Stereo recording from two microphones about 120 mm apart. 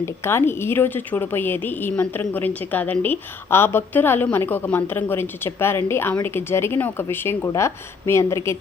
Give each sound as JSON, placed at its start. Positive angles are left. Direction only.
{"t": 0.0, "sound": "a woman's voice", "side_deg": 20}